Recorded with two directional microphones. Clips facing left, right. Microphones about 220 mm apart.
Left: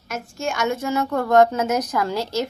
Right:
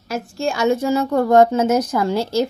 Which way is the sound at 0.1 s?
35° right (ahead or behind).